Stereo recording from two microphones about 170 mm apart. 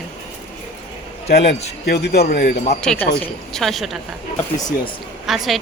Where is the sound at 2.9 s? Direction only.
5° left (ahead or behind).